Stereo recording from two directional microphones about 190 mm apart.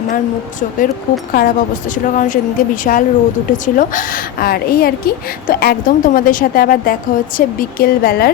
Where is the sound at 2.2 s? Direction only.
45° left (ahead or behind).